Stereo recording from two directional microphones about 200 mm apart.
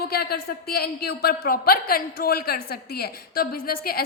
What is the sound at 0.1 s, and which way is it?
A man's voice, 50° left (ahead or behind).